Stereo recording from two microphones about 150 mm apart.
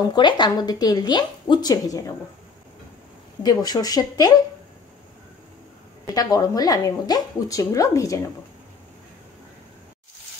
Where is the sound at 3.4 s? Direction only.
25° left (ahead or behind).